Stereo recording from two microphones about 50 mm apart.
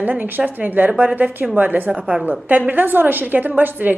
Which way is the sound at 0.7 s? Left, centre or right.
Right.